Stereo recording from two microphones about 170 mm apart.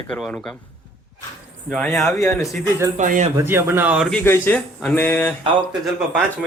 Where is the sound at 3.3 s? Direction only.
15° right (ahead or behind).